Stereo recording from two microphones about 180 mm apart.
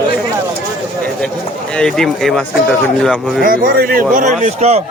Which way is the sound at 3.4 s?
55° right (ahead or behind).